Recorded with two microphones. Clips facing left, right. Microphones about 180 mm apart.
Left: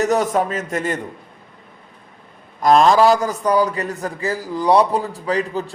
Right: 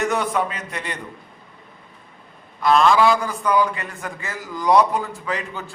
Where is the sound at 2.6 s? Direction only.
40° left (ahead or behind).